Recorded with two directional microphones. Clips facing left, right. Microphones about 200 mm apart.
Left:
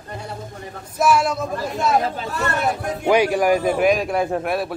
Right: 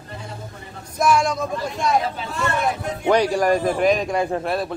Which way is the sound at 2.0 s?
40° left (ahead or behind).